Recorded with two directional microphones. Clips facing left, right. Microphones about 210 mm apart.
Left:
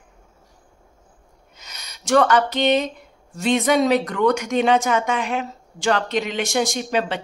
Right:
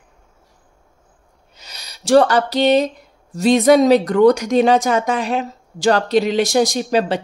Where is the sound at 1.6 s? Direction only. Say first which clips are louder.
Right 3 dB; 35° right (ahead or behind).